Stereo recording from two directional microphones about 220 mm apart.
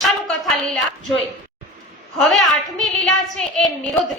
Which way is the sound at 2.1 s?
Centre (ahead or behind).